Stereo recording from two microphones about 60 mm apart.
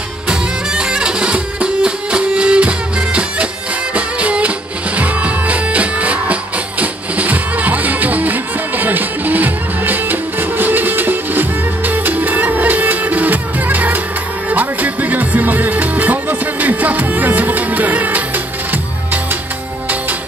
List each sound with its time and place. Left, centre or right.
0.3 s music: centre; by 18.8 s right